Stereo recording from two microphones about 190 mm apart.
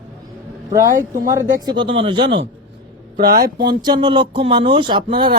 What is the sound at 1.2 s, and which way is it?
Speech, 20° right (ahead or behind).